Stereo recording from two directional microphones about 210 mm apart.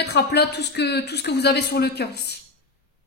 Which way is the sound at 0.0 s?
50° left (ahead or behind).